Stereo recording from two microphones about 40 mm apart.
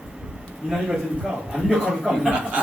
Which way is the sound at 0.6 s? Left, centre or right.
Centre.